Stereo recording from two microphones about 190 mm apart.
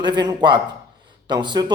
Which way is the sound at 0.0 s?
20° right (ahead or behind).